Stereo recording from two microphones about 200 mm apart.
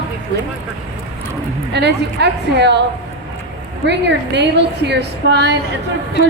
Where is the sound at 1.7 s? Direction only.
55° right (ahead or behind).